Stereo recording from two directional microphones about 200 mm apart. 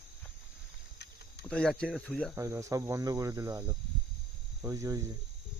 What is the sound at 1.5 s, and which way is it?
Speech, 5° left (ahead or behind).